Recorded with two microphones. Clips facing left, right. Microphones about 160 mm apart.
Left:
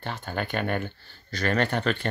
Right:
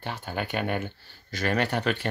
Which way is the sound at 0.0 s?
10° right (ahead or behind).